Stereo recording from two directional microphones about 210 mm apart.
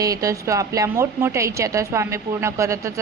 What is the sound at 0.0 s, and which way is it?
A woman's voice, 15° right (ahead or behind).